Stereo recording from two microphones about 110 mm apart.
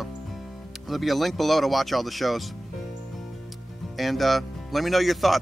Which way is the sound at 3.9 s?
Centre (ahead or behind).